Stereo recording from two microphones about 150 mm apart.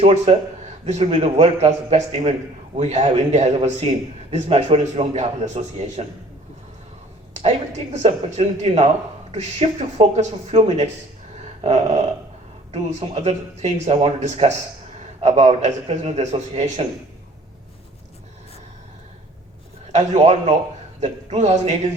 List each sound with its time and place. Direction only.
0.0 s a man's voice: 45° right (ahead or behind)
7.9 s a man's voice: 45° right (ahead or behind)
19.9 s a man's voice: 50° right (ahead or behind)